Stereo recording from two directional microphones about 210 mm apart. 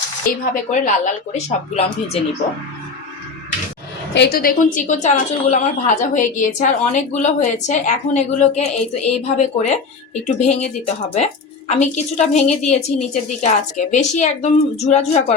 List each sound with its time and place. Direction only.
0.5 s a woman's voice: 35° left (ahead or behind)
4.1 s a woman's voice: 50° left (ahead or behind); by 15.4 s 30° left (ahead or behind)